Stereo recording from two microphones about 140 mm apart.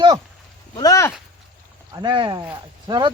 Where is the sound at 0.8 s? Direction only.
20° left (ahead or behind).